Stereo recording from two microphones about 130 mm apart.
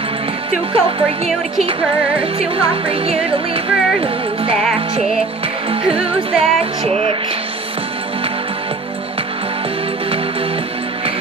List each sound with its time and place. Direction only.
0.7 s music: 45° right (ahead or behind)
5.7 s music: 45° right (ahead or behind)